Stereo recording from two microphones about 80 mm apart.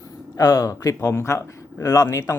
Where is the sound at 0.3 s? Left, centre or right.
Left.